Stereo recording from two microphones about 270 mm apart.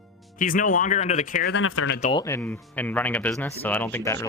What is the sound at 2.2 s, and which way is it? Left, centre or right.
A man's voice, centre.